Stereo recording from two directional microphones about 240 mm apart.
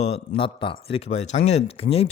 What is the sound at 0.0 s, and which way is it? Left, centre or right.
Speech, left.